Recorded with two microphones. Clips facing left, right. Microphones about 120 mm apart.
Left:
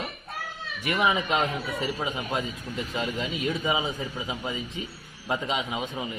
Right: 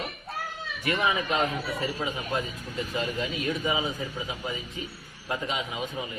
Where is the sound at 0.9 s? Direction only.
20° left (ahead or behind).